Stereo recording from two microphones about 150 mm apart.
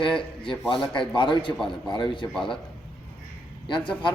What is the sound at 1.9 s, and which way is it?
Speech, 30° left (ahead or behind).